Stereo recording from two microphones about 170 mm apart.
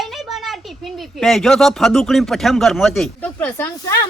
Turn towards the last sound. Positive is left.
turn(degrees=15)  # may be behind; listen again after turning